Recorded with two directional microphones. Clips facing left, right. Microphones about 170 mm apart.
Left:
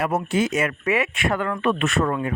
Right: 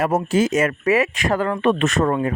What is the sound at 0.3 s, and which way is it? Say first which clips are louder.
Speech: right 4 dB; 45° right (ahead or behind).